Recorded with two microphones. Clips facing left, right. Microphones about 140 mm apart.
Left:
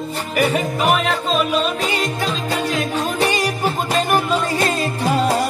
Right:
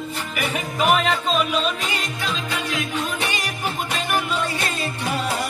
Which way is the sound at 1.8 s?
35° left (ahead or behind).